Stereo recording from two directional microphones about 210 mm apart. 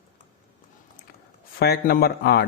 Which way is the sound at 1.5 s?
45° left (ahead or behind).